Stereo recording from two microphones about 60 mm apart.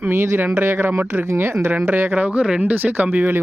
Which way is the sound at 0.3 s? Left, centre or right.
Right.